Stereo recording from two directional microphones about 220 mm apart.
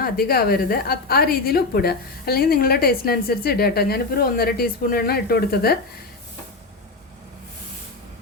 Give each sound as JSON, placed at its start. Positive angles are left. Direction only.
{"t": 0.0, "sound": "a woman's voice", "side_deg": 45}